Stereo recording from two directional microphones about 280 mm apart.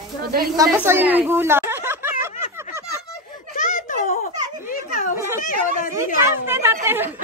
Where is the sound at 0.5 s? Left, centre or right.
Centre.